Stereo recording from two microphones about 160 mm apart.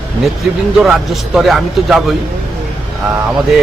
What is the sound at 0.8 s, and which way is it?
A man's voice, centre (ahead or behind).